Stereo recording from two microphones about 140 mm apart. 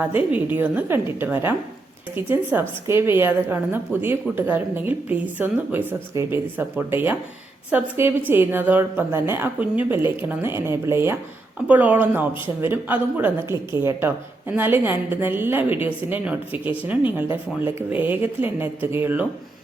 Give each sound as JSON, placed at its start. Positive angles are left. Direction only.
{"t": 0.0, "sound": "speech", "side_deg": -10}